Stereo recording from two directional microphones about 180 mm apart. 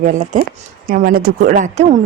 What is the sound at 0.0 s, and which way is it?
Speech, 40° right (ahead or behind).